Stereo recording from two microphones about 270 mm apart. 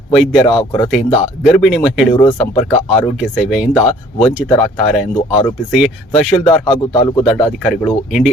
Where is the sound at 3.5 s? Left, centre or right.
Centre.